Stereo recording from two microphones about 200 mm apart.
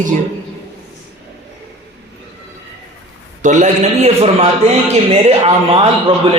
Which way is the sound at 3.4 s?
40° right (ahead or behind).